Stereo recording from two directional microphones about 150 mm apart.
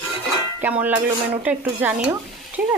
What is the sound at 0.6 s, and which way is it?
Music, 10° right (ahead or behind).